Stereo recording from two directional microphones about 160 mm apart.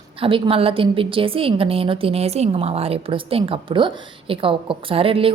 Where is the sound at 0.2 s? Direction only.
35° right (ahead or behind).